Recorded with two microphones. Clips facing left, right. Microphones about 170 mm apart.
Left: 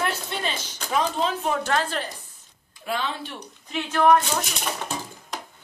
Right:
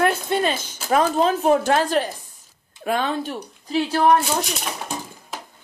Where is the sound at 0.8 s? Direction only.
50° right (ahead or behind).